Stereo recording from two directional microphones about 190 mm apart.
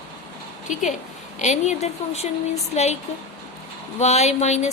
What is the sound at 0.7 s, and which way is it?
Speech, 40° left (ahead or behind).